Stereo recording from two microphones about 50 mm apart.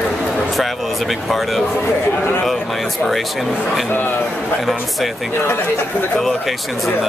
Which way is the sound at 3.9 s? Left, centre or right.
Left.